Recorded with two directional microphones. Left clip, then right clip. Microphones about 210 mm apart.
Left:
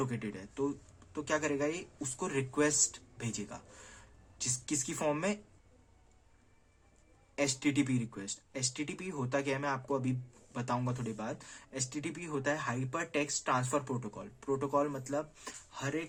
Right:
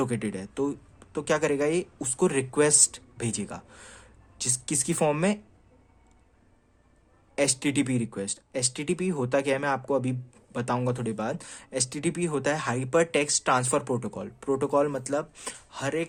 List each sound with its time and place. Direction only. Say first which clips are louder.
0.0 s speech: right 9 dB; 45° right (ahead or behind)
7.6 s speech: right 5 dB; 45° right (ahead or behind)